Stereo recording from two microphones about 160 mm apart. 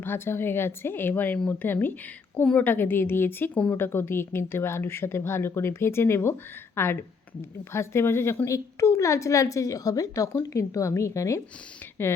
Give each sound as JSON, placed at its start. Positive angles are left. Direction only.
{"t": 0.0, "sound": "a woman's voice", "side_deg": 15}